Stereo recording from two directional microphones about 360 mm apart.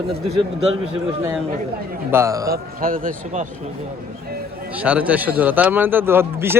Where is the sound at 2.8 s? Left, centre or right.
Right.